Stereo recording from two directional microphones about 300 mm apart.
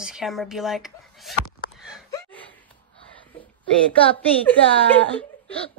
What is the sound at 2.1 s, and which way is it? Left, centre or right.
Gasp, centre.